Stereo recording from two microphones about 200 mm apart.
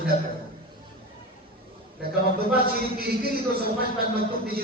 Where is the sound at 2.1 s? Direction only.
50° right (ahead or behind).